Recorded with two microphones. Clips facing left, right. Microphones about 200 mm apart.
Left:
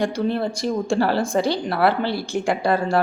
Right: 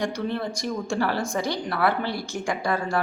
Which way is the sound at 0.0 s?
30° left (ahead or behind).